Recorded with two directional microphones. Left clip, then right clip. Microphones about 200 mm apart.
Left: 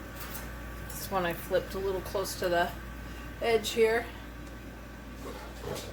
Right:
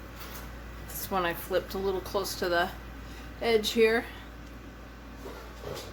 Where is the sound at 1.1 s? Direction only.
40° right (ahead or behind).